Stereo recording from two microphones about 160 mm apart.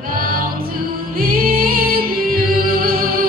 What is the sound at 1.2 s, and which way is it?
Music, 65° right (ahead or behind).